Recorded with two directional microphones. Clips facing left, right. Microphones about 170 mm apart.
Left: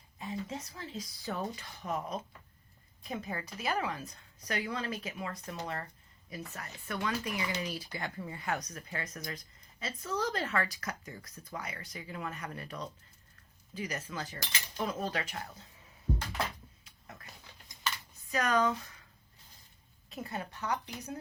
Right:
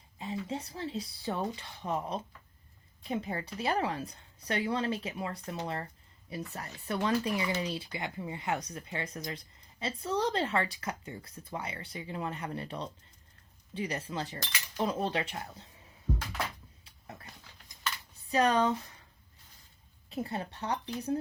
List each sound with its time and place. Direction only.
0.2 s a woman's voice: 30° right (ahead or behind)
16.8 s roaring cats: 35° right (ahead or behind)
18.3 s speech: 30° right (ahead or behind)
20.1 s a woman's voice: 30° right (ahead or behind)